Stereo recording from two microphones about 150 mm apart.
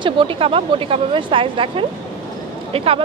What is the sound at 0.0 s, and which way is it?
Speech, 35° right (ahead or behind).